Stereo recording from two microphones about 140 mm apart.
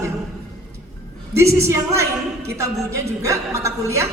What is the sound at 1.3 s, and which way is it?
A woman's voice, 20° right (ahead or behind).